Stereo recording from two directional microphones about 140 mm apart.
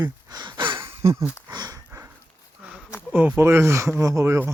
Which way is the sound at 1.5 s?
30° right (ahead or behind).